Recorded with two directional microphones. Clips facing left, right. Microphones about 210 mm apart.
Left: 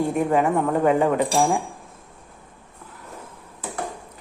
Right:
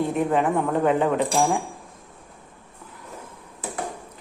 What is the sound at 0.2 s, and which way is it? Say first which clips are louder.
A woman's voice: left 2 dB; 10° left (ahead or behind).